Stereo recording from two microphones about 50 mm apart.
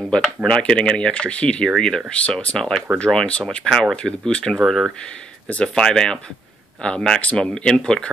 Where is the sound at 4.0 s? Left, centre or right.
Centre.